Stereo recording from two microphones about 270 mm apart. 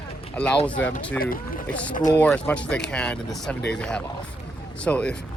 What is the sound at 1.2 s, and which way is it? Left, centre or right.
Speech, left.